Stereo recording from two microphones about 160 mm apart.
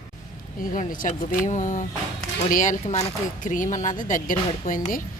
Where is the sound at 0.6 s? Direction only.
55° left (ahead or behind).